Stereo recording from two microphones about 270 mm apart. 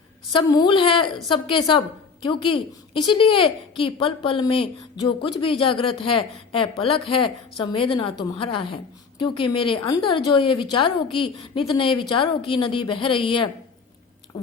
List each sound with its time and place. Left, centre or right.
0.3 s a woman's voice: centre